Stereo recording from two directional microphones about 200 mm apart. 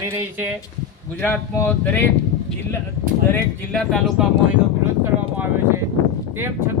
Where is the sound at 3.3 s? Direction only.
5° left (ahead or behind).